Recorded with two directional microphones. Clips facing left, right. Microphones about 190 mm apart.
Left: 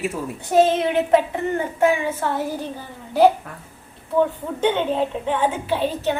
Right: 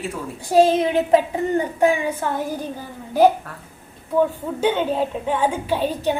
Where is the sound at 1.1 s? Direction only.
15° right (ahead or behind).